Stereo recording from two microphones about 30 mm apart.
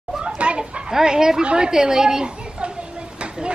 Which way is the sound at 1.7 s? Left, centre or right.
Centre.